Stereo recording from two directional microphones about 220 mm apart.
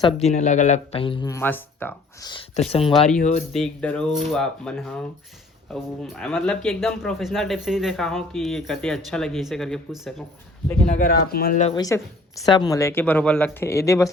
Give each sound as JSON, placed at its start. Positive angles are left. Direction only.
{"t": 0.0, "sound": "speech", "side_deg": 30}
{"t": 2.7, "sound": "speech", "side_deg": 25}
{"t": 3.5, "sound": "speech", "side_deg": 5}
{"t": 10.8, "sound": "speech", "side_deg": 35}
{"t": 11.7, "sound": "speech", "side_deg": 15}